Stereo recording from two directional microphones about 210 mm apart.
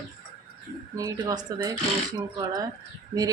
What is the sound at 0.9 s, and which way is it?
A woman's voice, 20° right (ahead or behind).